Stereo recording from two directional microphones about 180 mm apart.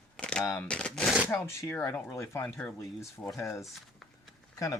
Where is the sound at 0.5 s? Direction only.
5° left (ahead or behind).